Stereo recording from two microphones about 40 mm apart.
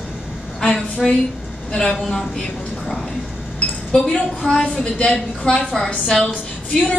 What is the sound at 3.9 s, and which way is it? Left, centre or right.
A woman's voice, centre.